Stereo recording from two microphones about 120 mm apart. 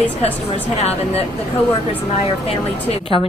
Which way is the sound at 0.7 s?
60° left (ahead or behind).